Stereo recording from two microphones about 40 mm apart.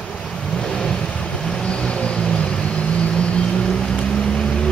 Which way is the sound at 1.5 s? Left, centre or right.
Left.